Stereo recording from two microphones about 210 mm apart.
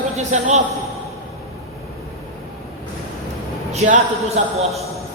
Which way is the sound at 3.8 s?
35° right (ahead or behind).